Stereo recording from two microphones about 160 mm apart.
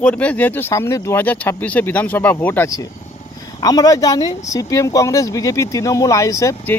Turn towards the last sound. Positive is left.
turn(degrees=15)  # may be behind; listen again after turning